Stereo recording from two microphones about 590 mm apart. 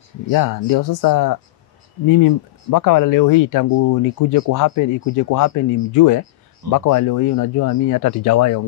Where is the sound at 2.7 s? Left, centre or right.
Left.